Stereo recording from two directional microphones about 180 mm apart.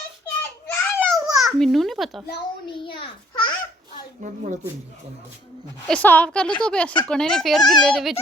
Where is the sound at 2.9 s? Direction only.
25° left (ahead or behind).